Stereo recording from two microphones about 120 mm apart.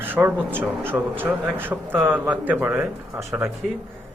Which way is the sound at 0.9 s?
15° right (ahead or behind).